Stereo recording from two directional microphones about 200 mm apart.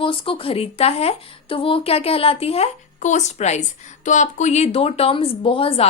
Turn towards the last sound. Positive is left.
turn(degrees=30)  # may be behind; listen again after turning